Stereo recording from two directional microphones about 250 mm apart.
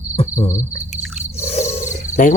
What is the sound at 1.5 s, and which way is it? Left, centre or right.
Bird, left.